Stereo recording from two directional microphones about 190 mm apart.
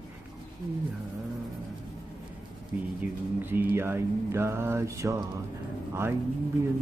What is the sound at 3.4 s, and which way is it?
Mantra, 10° right (ahead or behind).